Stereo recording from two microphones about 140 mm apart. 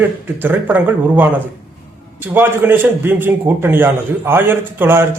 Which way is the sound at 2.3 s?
15° right (ahead or behind).